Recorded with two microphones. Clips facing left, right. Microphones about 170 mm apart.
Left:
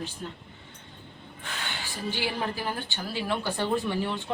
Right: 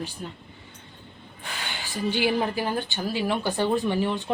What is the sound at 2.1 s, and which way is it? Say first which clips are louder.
A woman's voice: right 7 dB; 15° right (ahead or behind).